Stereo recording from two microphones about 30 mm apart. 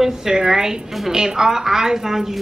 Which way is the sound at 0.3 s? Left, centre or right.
Right.